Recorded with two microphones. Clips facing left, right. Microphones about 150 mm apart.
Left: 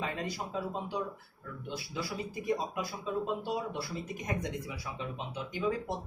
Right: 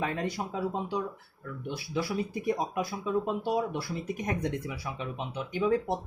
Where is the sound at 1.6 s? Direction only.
65° right (ahead or behind).